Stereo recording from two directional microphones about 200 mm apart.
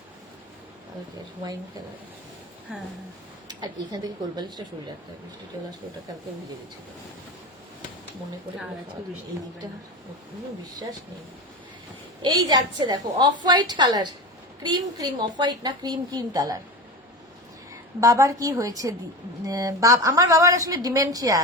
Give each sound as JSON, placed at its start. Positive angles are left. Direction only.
{"t": 3.6, "sound": "a woman's voice", "side_deg": -20}
{"t": 12.2, "sound": "a woman's voice", "side_deg": -20}
{"t": 18.0, "sound": "a woman's voice", "side_deg": -15}